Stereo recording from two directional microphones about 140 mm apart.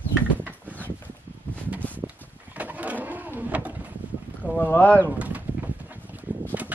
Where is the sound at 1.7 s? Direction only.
10° left (ahead or behind).